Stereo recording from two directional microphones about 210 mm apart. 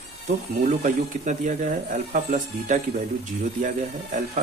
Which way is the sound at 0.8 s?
35° right (ahead or behind).